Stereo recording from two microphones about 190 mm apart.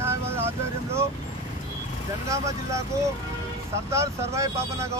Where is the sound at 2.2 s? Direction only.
15° right (ahead or behind).